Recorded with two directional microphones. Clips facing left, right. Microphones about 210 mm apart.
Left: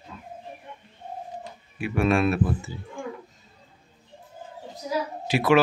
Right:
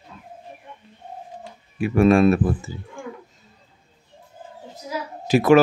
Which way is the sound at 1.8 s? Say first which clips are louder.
Right 7 dB; 40° right (ahead or behind).